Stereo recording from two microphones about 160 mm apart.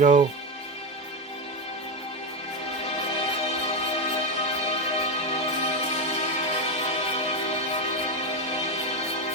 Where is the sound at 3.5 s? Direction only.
40° left (ahead or behind).